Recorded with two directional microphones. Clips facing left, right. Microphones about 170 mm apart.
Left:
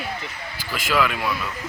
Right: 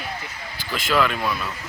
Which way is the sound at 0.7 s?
5° left (ahead or behind).